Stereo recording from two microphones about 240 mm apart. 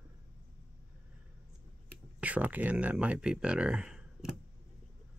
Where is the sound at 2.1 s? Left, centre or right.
Centre.